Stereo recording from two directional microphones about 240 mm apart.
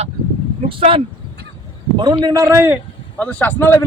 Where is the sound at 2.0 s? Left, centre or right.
Centre.